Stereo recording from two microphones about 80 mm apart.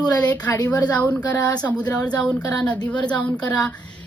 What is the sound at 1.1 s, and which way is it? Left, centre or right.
Speech, centre.